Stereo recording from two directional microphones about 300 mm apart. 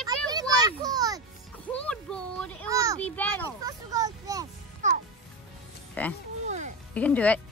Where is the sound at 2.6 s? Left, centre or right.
Centre.